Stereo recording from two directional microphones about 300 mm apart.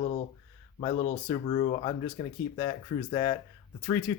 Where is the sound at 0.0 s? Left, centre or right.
Left.